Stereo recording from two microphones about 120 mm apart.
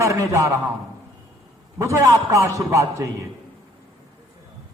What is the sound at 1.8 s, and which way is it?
A woman's voice, 25° right (ahead or behind).